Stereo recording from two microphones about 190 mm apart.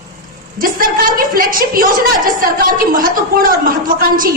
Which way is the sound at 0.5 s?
50° right (ahead or behind).